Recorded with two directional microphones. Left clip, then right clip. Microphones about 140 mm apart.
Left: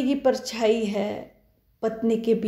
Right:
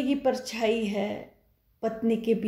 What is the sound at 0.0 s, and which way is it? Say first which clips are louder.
A woman's voice: left 4 dB; 25° left (ahead or behind).